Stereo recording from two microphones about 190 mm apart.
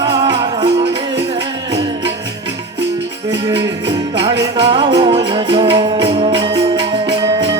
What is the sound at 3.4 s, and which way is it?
Music, 25° right (ahead or behind).